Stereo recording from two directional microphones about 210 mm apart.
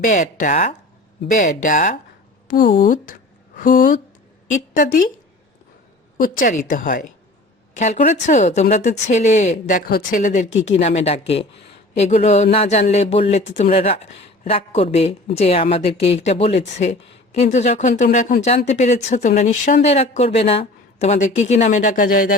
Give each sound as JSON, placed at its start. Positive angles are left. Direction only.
{"t": 0.0, "sound": "speech", "side_deg": 35}
{"t": 6.2, "sound": "speech", "side_deg": 40}